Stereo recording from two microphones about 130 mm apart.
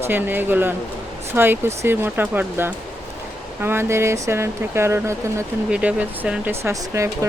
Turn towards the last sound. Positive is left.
turn(degrees=-25)  # may be behind; listen again after turning